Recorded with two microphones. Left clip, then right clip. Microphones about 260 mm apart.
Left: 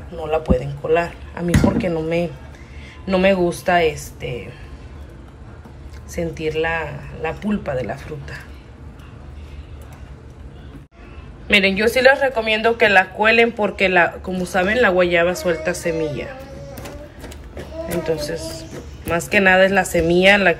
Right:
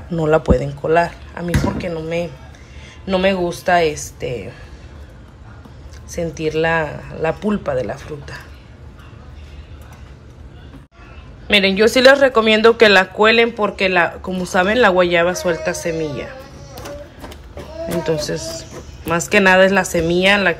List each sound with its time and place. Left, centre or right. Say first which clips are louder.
0.4 s speech: right 3 dB; right
0.9 s speech: right 3 dB; centre
6.0 s speech: right 2 dB; centre
11.4 s speech: right 2 dB; centre
18.0 s speech: right 3 dB; centre